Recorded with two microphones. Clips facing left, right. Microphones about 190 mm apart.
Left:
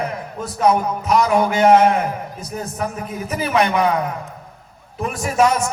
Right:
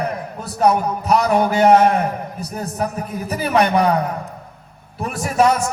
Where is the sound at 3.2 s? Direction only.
35° right (ahead or behind).